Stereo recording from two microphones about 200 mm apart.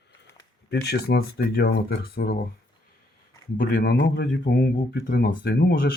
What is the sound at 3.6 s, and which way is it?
Speech, 45° left (ahead or behind).